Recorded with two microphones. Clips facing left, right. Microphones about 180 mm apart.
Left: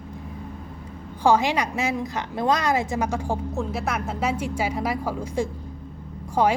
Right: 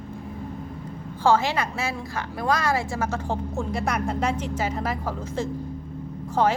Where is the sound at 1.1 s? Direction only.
15° left (ahead or behind).